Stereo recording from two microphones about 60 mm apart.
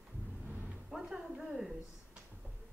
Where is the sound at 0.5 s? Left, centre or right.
Right.